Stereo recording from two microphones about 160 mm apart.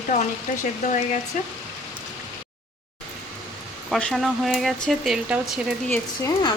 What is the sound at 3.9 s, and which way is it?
Speech, centre (ahead or behind).